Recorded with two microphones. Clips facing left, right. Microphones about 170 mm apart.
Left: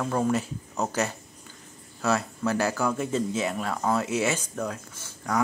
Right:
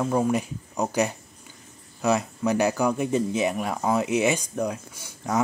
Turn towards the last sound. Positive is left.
turn(degrees=-15)  # may be behind; listen again after turning